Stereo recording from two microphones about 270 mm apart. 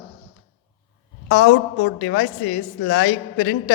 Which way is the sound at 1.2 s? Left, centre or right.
Left.